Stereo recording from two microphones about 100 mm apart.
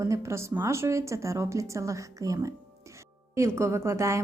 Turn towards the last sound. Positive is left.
turn(degrees=-30)  # may be behind; listen again after turning